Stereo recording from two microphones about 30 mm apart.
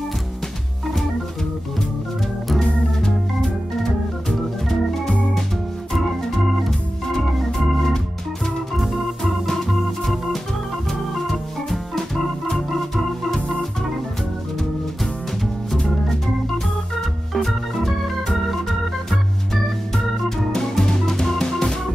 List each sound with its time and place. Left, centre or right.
2.6 s organ: left
10.9 s organ: centre
17.5 s organ: centre
20.2 s music: centre